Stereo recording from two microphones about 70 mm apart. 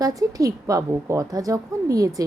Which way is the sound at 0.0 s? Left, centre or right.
Right.